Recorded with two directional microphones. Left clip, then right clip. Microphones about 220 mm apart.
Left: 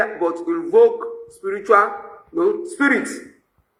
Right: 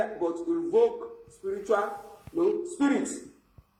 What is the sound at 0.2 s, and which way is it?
Speech, 55° left (ahead or behind).